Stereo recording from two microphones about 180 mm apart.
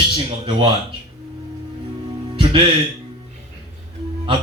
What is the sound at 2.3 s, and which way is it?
Music, 25° right (ahead or behind).